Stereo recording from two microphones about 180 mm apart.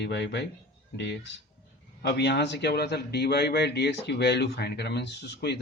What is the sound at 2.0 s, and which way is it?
A man's voice, 65° left (ahead or behind).